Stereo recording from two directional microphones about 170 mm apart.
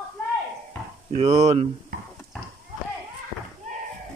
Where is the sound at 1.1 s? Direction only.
40° right (ahead or behind).